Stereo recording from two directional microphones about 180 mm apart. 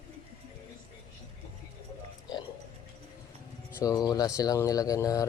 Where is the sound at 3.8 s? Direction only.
20° left (ahead or behind).